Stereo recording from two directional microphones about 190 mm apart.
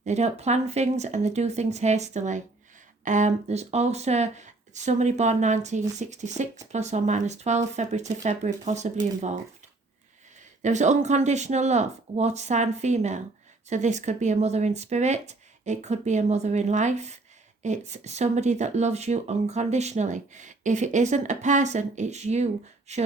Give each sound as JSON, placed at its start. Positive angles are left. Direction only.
{"t": 0.0, "sound": "speech", "side_deg": -35}
{"t": 10.6, "sound": "speech", "side_deg": -40}